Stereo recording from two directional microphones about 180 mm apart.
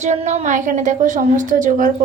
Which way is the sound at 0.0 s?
40° right (ahead or behind).